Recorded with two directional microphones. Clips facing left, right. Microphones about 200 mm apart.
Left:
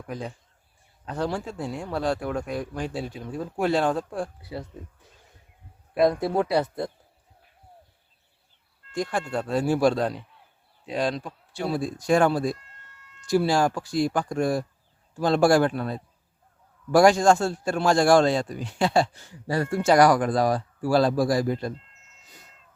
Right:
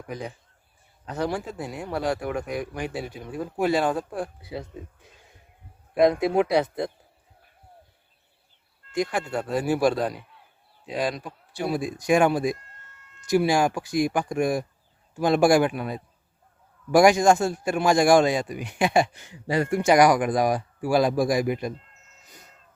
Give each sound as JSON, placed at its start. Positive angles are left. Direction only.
{"t": 1.1, "sound": "a man's voice", "side_deg": -10}
{"t": 6.0, "sound": "a man's voice", "side_deg": -15}
{"t": 9.0, "sound": "a man's voice", "side_deg": -10}